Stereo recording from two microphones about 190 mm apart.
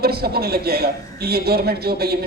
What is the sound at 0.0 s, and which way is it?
A man's voice, 55° right (ahead or behind).